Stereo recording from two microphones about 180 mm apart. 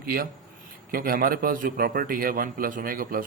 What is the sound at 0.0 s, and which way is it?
A man's voice, 55° right (ahead or behind).